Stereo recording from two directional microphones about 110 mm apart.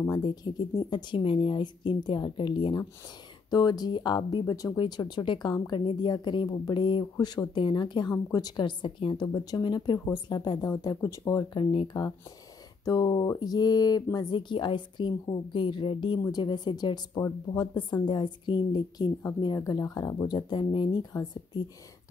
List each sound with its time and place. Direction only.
0.4 s a woman's voice: 40° left (ahead or behind)
11.5 s speech: 60° left (ahead or behind)
12.8 s a woman's voice: 35° left (ahead or behind); by 16.2 s 50° left (ahead or behind)
16.2 s speech: 40° left (ahead or behind)
20.3 s a woman's voice: 45° left (ahead or behind)